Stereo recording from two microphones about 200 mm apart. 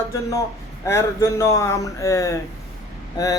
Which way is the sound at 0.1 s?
15° left (ahead or behind).